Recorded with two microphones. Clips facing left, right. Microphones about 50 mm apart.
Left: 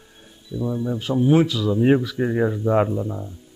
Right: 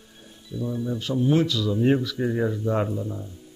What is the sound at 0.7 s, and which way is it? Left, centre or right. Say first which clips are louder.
Speech: left 3 dB; centre.